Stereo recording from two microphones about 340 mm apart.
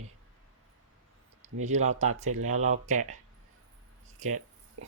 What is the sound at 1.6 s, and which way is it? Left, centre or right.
Speech, right.